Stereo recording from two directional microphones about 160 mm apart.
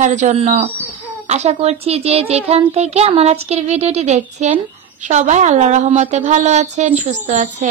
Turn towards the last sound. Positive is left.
turn(degrees=-45)  # may be behind; listen again after turning